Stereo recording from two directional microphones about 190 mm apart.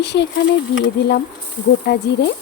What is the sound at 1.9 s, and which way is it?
Speech, 60° left (ahead or behind).